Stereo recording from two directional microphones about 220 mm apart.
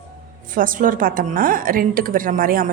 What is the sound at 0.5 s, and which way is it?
A woman's voice, 40° right (ahead or behind).